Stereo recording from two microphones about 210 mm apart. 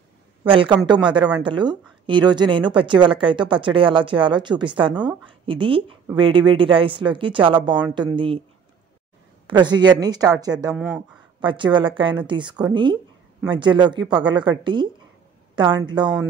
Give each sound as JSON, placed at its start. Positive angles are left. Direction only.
{"t": 0.4, "sound": "a woman's voice", "side_deg": -25}
{"t": 9.6, "sound": "a woman's voice", "side_deg": -20}
{"t": 10.7, "sound": "speech", "side_deg": -5}
{"t": 11.4, "sound": "a woman's voice", "side_deg": -20}